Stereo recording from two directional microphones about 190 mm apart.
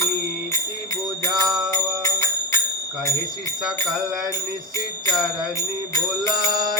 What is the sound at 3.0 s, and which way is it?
Speech, 20° left (ahead or behind).